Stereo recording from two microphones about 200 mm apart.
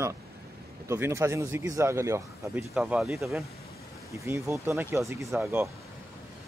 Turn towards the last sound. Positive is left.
turn(degrees=-15)  # may be behind; listen again after turning